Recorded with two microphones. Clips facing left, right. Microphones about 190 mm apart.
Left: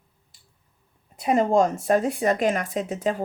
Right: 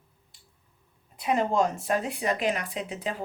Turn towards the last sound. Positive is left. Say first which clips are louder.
# left 7 dB
turn(degrees=45)  # may be behind; listen again after turning